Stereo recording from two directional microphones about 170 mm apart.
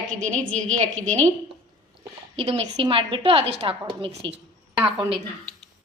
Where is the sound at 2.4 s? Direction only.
35° right (ahead or behind).